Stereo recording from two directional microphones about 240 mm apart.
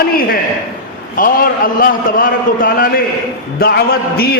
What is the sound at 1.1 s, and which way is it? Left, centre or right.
A man's voice, left.